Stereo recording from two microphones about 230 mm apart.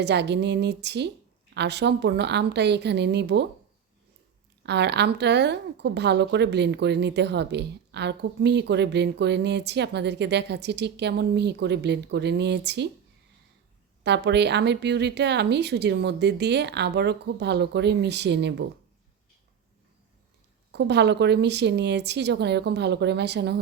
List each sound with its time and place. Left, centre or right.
0.0 s a woman's voice: right
4.6 s a woman's voice: right
14.0 s a woman's voice: right
20.7 s a woman's voice: right